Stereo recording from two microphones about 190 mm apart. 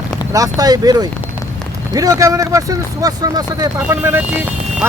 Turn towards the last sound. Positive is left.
turn(degrees=-10)  # may be behind; listen again after turning